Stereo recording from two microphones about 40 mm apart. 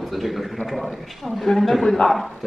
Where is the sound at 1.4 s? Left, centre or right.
Centre.